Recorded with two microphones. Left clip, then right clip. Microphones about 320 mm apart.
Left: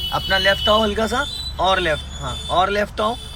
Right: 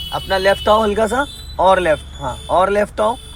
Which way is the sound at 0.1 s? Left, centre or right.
Centre.